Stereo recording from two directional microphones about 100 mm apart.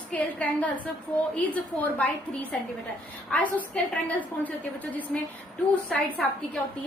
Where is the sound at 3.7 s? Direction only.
15° left (ahead or behind).